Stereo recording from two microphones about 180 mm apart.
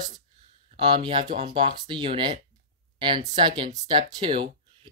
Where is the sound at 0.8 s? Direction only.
25° right (ahead or behind).